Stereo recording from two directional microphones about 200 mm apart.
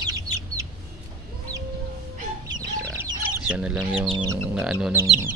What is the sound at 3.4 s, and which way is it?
Speech, 5° right (ahead or behind).